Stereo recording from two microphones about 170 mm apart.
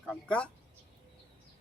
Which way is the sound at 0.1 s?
5° left (ahead or behind).